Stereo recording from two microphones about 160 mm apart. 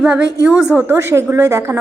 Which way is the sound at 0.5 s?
5° right (ahead or behind).